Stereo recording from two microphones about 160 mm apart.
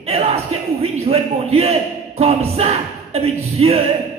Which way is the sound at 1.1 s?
40° right (ahead or behind).